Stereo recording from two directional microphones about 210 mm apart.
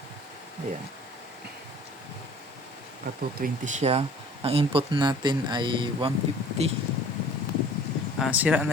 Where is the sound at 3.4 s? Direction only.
35° right (ahead or behind).